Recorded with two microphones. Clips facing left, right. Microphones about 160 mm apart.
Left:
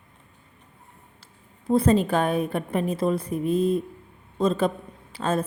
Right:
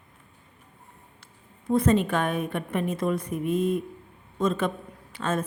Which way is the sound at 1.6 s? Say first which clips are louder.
Left 2 dB; 30° left (ahead or behind).